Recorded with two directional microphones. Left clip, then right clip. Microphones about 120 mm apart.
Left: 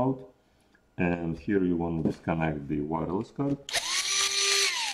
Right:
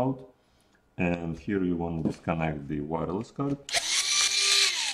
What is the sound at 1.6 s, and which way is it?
Speech, 5° right (ahead or behind).